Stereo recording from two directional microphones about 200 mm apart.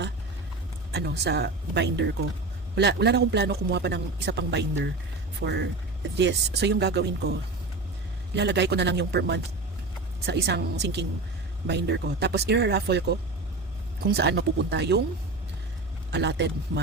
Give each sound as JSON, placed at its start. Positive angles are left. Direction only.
{"t": 0.9, "sound": "a man's voice", "side_deg": -55}
{"t": 8.4, "sound": "a man's voice", "side_deg": -60}
{"t": 16.1, "sound": "a man's voice", "side_deg": -60}